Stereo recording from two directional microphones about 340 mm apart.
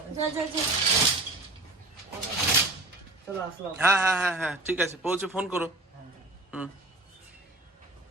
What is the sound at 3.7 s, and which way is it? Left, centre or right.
Speech, centre.